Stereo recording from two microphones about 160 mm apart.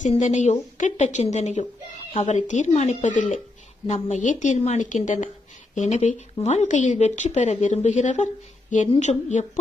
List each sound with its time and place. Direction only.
0.0 s a woman's voice: 45° left (ahead or behind)